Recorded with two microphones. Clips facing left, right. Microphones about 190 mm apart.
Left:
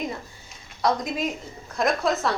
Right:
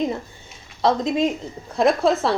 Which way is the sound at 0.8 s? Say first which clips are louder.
Right 5 dB; 25° right (ahead or behind).